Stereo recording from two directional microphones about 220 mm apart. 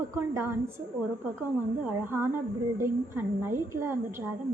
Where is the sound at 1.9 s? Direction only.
10° right (ahead or behind).